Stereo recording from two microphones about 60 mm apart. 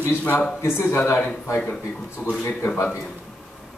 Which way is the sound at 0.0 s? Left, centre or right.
Left.